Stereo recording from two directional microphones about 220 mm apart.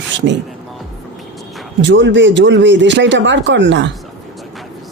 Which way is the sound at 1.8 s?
55° right (ahead or behind).